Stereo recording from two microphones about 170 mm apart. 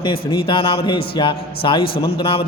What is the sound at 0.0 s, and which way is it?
A man's voice, 30° left (ahead or behind).